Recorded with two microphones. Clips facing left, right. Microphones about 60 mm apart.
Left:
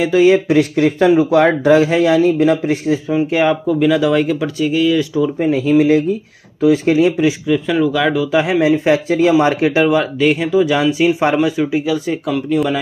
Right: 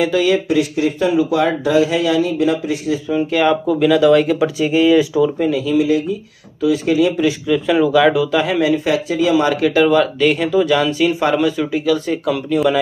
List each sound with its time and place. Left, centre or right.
0.1 s speech: left
0.5 s speech: left
3.1 s speech: centre
3.6 s speech: centre
4.6 s speech: right
5.5 s speech: left
7.2 s speech: centre
8.4 s speech: left
9.9 s speech: centre
12.3 s speech: centre